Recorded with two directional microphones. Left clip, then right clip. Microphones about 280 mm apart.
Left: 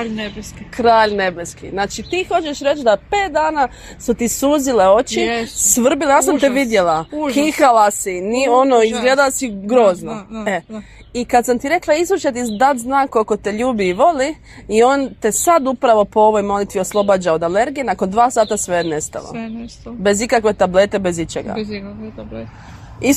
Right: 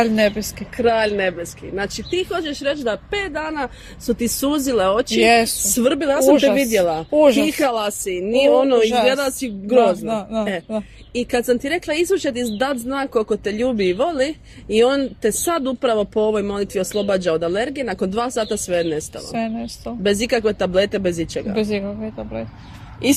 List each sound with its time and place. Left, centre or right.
0.0 s speech: right
0.8 s speech: centre
5.2 s speech: right
5.7 s speech: centre
11.2 s speech: centre
21.5 s speech: right